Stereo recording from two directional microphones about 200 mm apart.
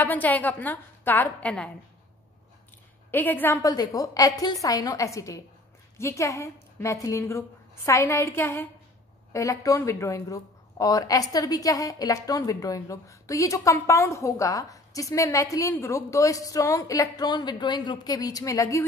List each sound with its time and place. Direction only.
0.0 s speech: 10° left (ahead or behind)
3.1 s speech: 10° left (ahead or behind)